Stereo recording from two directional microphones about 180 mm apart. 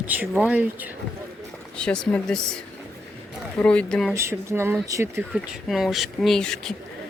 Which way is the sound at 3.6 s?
5° left (ahead or behind).